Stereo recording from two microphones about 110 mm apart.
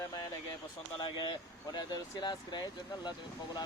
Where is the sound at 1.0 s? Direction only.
45° left (ahead or behind).